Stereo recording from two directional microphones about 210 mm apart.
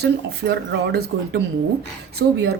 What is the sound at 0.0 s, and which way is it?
Speech, 55° right (ahead or behind).